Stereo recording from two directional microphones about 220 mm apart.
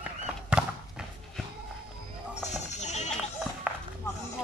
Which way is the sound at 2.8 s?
30° left (ahead or behind).